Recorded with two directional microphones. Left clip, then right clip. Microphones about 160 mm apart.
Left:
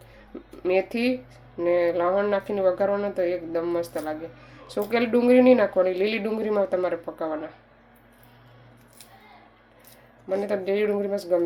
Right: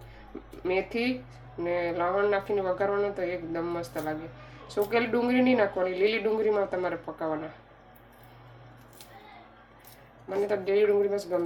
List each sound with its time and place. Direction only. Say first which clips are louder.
0.6 s speech: left 5 dB; 50° left (ahead or behind)
10.2 s speech: left 3 dB; 50° left (ahead or behind)